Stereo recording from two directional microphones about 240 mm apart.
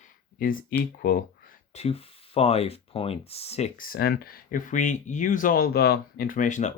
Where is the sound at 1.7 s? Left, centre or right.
Left.